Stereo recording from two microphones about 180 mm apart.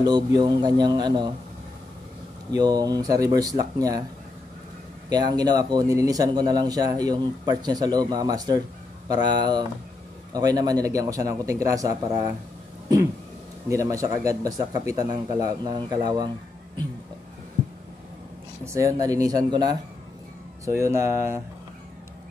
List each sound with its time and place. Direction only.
0.0 s speech: 25° right (ahead or behind)
2.5 s speech: 20° right (ahead or behind)
5.1 s speech: 20° right (ahead or behind)
13.7 s speech: 20° right (ahead or behind)
18.6 s speech: 15° right (ahead or behind)